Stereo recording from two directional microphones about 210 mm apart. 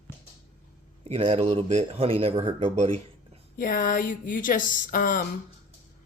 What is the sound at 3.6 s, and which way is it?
Speech, 40° left (ahead or behind).